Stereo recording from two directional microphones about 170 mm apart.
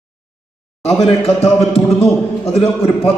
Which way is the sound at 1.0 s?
35° left (ahead or behind).